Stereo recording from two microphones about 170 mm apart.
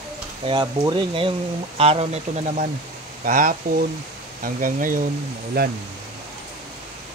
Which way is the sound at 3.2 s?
55° right (ahead or behind).